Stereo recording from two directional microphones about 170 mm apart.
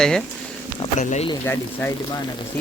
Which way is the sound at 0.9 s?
40° left (ahead or behind).